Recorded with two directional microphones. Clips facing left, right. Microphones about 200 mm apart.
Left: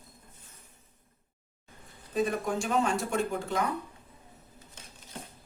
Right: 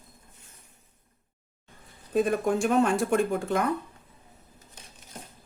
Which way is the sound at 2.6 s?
55° right (ahead or behind).